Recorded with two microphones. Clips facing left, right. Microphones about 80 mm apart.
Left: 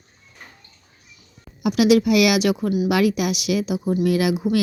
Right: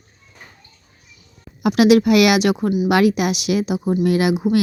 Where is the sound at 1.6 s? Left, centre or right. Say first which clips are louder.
Right 3 dB; right.